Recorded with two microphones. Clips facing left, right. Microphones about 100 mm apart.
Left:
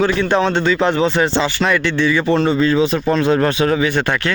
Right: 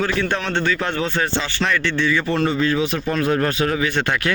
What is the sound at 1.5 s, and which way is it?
Speech, 10° left (ahead or behind).